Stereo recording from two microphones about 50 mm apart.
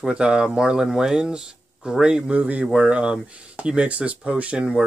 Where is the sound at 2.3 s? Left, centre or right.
Right.